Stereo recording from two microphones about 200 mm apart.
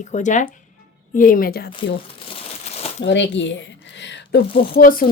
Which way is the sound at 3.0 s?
65° left (ahead or behind).